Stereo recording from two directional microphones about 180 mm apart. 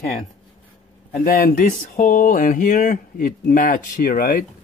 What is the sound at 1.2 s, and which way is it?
Speech, 50° left (ahead or behind).